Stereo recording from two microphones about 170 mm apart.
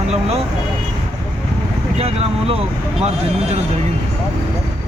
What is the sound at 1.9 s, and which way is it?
Speech, 35° right (ahead or behind).